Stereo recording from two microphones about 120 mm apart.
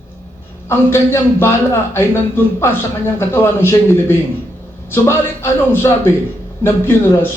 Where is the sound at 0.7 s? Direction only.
20° left (ahead or behind).